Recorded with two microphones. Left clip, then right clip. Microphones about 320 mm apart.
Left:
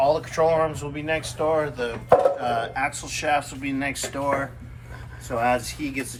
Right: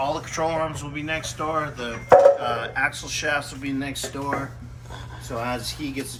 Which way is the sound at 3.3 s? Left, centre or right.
Centre.